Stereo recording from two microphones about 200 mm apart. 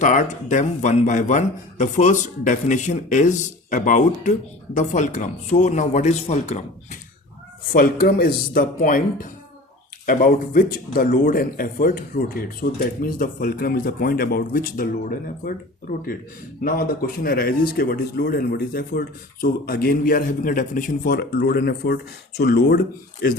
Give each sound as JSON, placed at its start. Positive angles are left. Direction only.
{"t": 0.0, "sound": "a man's voice", "side_deg": 40}
{"t": 7.7, "sound": "speech", "side_deg": 45}
{"t": 10.1, "sound": "speech", "side_deg": 45}
{"t": 17.2, "sound": "speech", "side_deg": 45}